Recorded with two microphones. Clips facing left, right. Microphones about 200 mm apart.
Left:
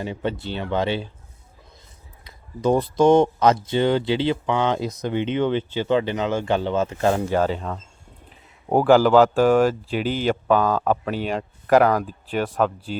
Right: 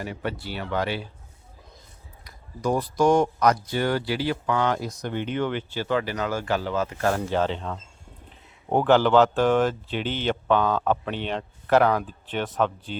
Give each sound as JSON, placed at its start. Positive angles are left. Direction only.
{"t": 0.0, "sound": "speech", "side_deg": 20}
{"t": 2.2, "sound": "speech", "side_deg": 25}
{"t": 7.3, "sound": "speech", "side_deg": 5}